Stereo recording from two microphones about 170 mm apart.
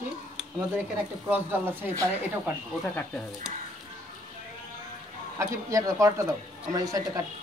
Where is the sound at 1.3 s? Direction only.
10° right (ahead or behind).